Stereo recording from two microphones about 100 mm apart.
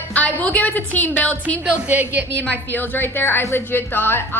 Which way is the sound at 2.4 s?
20° left (ahead or behind).